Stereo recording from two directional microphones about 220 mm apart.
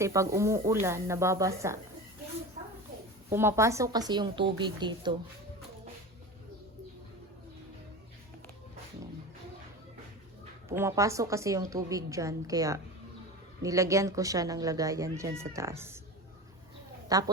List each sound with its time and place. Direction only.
0.0 s speech: 15° right (ahead or behind)
3.2 s speech: 10° right (ahead or behind)
10.7 s speech: 10° right (ahead or behind)
17.1 s a woman's voice: 15° right (ahead or behind)